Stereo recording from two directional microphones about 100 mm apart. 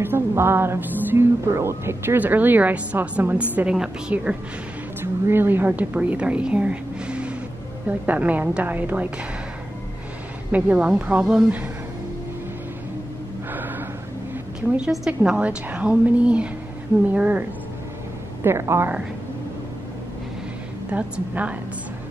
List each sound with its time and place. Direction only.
0.0 s a woman's voice: 25° right (ahead or behind)
5.0 s a woman's voice: 25° right (ahead or behind)
10.5 s a woman's voice: 10° right (ahead or behind)
13.5 s gasp: 20° right (ahead or behind)
14.9 s a woman's voice: 10° right (ahead or behind)
18.4 s speech: 25° right (ahead or behind)
20.9 s a woman's voice: 15° right (ahead or behind)